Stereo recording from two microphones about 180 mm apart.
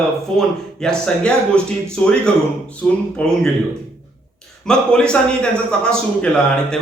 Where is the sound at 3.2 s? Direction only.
5° left (ahead or behind).